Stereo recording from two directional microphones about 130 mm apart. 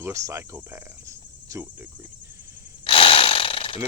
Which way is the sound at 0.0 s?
25° right (ahead or behind).